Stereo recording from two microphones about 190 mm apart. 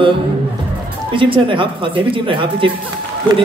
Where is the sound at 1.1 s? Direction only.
25° right (ahead or behind).